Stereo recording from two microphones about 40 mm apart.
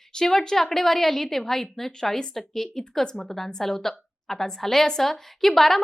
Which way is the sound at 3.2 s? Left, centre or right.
Centre.